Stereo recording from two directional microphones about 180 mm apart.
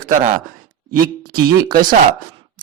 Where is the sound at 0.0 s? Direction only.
45° right (ahead or behind).